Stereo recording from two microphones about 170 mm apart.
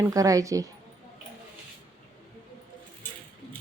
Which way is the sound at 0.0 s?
20° right (ahead or behind).